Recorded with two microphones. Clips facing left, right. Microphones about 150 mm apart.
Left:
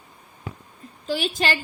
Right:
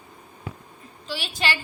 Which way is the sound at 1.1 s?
45° left (ahead or behind).